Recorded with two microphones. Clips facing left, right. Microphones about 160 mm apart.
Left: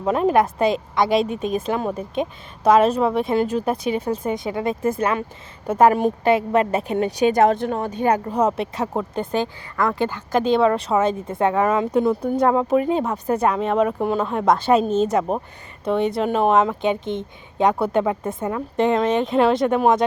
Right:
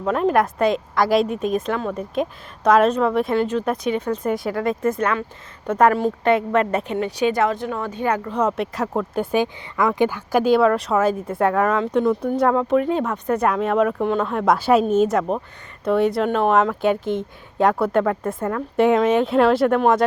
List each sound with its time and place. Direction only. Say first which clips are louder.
0.0 s speech: left 1 dB; 5° left (ahead or behind)
5.9 s speech: left 1 dB; 15° left (ahead or behind)
6.2 s speech: even; 5° left (ahead or behind)
6.8 s speech: left 2 dB; 40° left (ahead or behind)
8.0 s speech: left 2 dB; 40° left (ahead or behind)
8.7 s speech: right 1 dB; centre (ahead or behind)
18.0 s speech: right 1 dB; 10° left (ahead or behind)
18.8 s speech: right 3 dB; 10° right (ahead or behind)